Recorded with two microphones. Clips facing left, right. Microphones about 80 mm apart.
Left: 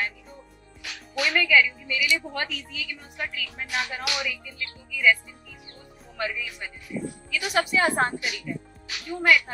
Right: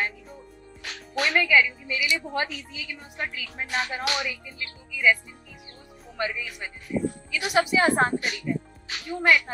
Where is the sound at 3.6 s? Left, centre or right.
Right.